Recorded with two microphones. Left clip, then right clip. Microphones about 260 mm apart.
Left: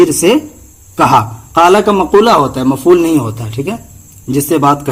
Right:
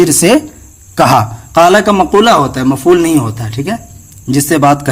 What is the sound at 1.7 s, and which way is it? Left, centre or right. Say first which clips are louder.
A man's voice: right 1 dB; right.